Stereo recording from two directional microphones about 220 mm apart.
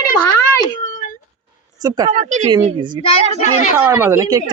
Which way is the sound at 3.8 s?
10° right (ahead or behind).